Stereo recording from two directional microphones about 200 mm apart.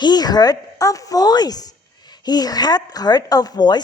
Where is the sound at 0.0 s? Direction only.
20° left (ahead or behind).